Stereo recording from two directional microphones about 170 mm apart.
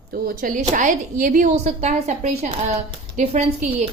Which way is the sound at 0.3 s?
50° right (ahead or behind).